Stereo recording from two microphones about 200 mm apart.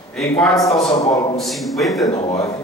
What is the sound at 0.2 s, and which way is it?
Speech, centre (ahead or behind).